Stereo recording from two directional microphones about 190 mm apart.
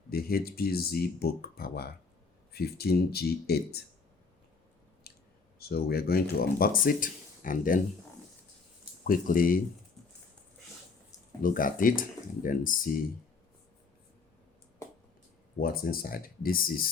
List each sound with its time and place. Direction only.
0.1 s speech: 50° left (ahead or behind)
5.1 s clicking: 55° left (ahead or behind)
5.5 s speech: 55° left (ahead or behind)
9.0 s speech: 45° left (ahead or behind)
11.4 s speech: 45° left (ahead or behind)
15.5 s speech: 50° left (ahead or behind)